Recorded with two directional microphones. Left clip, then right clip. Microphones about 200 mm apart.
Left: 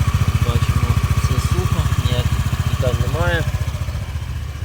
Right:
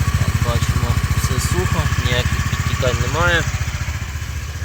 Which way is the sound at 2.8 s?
Centre (ahead or behind).